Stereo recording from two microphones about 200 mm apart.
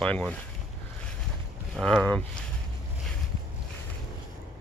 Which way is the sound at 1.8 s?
5° left (ahead or behind).